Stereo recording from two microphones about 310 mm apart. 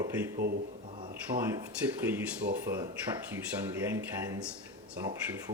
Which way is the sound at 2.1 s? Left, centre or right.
Centre.